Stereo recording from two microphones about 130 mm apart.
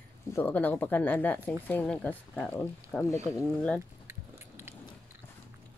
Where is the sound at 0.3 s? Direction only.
15° left (ahead or behind).